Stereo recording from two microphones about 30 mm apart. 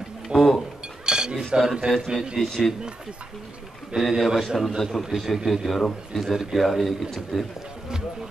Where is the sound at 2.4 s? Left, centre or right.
Centre.